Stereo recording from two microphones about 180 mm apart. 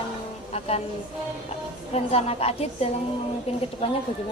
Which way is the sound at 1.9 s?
35° left (ahead or behind).